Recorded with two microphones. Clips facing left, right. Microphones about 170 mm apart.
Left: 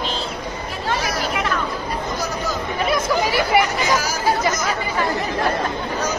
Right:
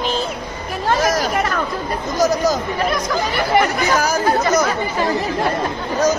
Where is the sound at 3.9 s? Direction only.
60° right (ahead or behind).